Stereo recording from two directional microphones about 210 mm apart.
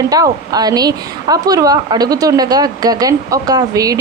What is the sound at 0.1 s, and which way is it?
A woman's voice, 20° right (ahead or behind).